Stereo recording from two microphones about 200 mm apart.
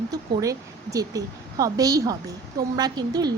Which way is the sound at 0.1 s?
20° right (ahead or behind).